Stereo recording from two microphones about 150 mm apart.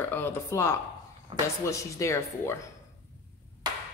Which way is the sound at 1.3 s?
35° right (ahead or behind).